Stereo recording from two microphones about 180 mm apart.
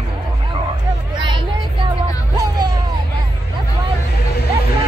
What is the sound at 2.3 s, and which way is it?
Music, 20° right (ahead or behind).